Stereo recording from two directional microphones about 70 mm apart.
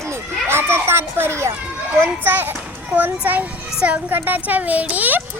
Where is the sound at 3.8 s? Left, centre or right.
Centre.